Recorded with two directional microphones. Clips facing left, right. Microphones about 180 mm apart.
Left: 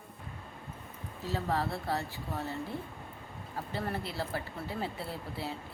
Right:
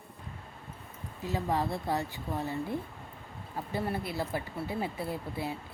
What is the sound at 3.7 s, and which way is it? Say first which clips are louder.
Speech: right 3 dB; 15° right (ahead or behind).